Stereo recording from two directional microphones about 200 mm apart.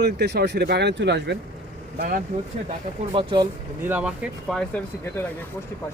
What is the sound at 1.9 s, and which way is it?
Speech, 45° right (ahead or behind).